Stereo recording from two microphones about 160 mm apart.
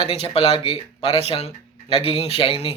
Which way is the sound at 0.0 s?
40° left (ahead or behind).